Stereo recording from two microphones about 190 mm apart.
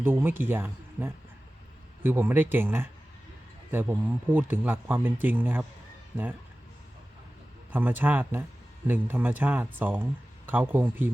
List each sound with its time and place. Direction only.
0.0 s speech: 10° right (ahead or behind)
7.7 s speech: 10° right (ahead or behind)